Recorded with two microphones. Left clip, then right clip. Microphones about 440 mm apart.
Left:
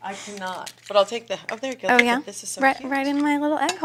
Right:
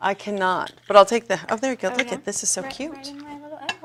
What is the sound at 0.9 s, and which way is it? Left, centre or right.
Speech, right.